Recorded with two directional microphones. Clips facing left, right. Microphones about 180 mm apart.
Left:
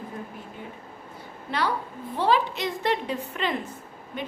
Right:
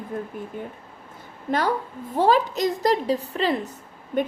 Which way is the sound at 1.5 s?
45° right (ahead or behind).